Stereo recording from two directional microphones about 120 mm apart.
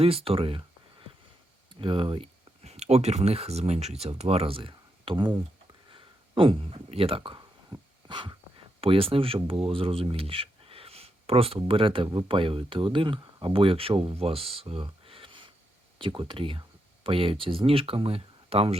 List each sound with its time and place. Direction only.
0.0 s speech: 55° right (ahead or behind)
1.7 s speech: 45° right (ahead or behind)
7.7 s dog: 40° right (ahead or behind)
8.8 s speech: 50° right (ahead or behind)
14.8 s a sound: 50° right (ahead or behind)
16.0 s speech: 45° right (ahead or behind)